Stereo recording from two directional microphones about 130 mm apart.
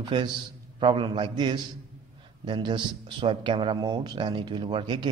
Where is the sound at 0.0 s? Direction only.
35° right (ahead or behind).